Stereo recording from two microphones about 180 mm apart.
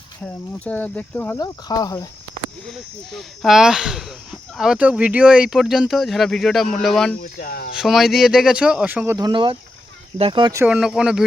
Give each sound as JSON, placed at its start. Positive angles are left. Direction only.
{"t": 0.2, "sound": "speech", "side_deg": 10}
{"t": 1.4, "sound": "cricket", "side_deg": 20}
{"t": 2.6, "sound": "speech", "side_deg": 0}
{"t": 7.2, "sound": "speech", "side_deg": 55}
{"t": 7.8, "sound": "speech", "side_deg": 0}
{"t": 9.1, "sound": "speech", "side_deg": -25}
{"t": 10.6, "sound": "speech", "side_deg": -5}